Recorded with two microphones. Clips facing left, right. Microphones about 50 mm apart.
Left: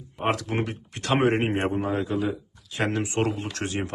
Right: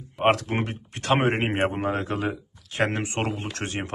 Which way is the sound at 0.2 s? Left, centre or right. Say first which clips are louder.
Right 5 dB; right.